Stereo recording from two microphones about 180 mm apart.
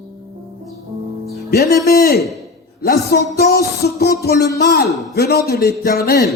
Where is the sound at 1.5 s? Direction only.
60° left (ahead or behind).